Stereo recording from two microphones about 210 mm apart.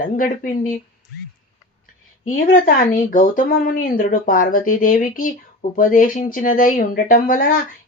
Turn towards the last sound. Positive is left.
turn(degrees=40)  # may be behind; listen again after turning